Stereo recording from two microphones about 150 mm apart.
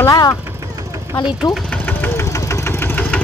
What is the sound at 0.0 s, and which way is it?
Vehicle, 20° left (ahead or behind).